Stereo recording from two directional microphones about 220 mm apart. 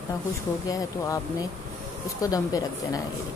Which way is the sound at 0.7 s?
15° left (ahead or behind).